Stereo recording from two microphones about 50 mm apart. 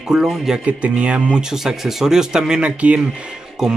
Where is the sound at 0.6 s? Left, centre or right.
Right.